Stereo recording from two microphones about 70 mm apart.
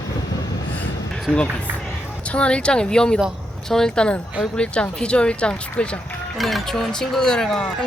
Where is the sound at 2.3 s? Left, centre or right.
Centre.